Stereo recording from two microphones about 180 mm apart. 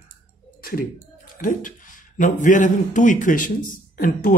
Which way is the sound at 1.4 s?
50° left (ahead or behind).